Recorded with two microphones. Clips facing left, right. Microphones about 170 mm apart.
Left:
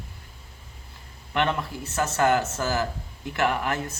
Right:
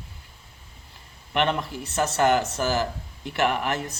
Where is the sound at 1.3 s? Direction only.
20° right (ahead or behind).